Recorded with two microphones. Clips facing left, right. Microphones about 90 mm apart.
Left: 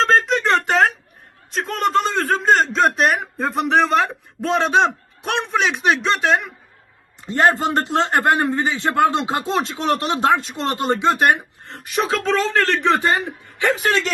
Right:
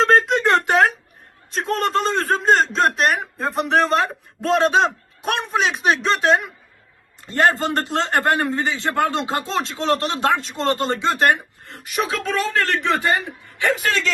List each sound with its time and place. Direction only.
1.5 s a man's voice: centre (ahead or behind)
7.2 s a man's voice: 20° left (ahead or behind)
11.7 s a man's voice: 30° left (ahead or behind)